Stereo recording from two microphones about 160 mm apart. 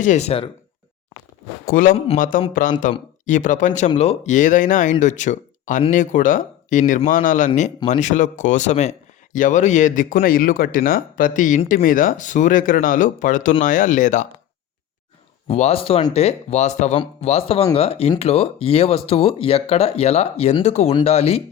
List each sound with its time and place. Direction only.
0.0 s speech: 45° left (ahead or behind)
1.6 s speech: 60° left (ahead or behind)
15.4 s speech: 40° left (ahead or behind)